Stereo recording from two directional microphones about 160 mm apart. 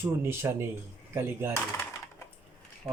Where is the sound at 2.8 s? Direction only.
20° right (ahead or behind).